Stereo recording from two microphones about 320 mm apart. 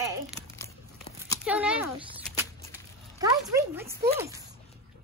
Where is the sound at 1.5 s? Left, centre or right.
Centre.